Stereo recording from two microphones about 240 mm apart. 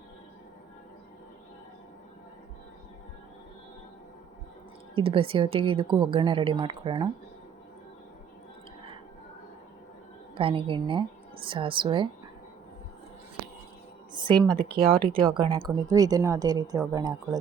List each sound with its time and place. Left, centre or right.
4.9 s a woman's voice: right
10.3 s a woman's voice: right
14.1 s a sound: centre
14.8 s a woman's voice: right